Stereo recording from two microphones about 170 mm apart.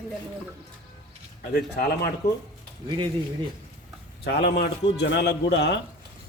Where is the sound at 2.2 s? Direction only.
20° left (ahead or behind).